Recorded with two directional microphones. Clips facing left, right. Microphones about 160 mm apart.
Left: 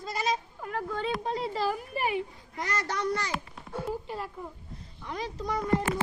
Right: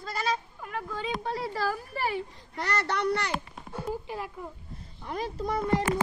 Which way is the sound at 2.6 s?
70° right (ahead or behind).